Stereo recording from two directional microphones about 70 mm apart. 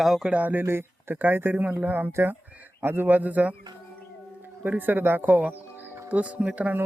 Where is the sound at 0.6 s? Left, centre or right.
Right.